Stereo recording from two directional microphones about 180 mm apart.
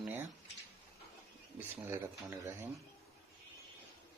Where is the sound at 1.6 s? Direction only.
15° right (ahead or behind).